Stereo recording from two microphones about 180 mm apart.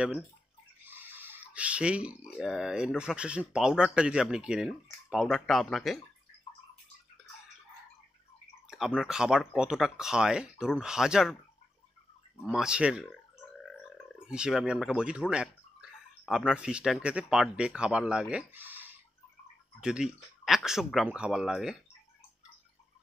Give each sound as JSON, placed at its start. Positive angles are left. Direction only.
{"t": 0.8, "sound": "speech", "side_deg": -10}
{"t": 8.6, "sound": "speech", "side_deg": 0}
{"t": 12.4, "sound": "speech", "side_deg": -5}